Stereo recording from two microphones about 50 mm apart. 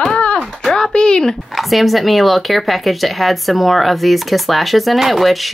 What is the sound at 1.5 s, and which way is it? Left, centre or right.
Speech, centre.